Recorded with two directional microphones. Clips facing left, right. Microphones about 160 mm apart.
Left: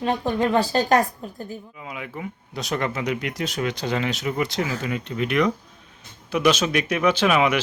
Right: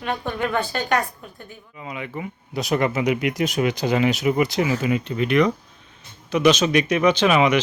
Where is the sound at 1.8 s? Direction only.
Centre (ahead or behind).